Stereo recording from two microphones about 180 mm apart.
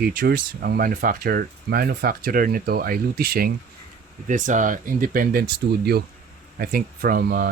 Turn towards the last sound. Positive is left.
turn(degrees=-55)  # may be behind; listen again after turning